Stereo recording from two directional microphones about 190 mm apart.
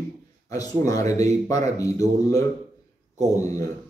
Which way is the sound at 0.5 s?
20° left (ahead or behind).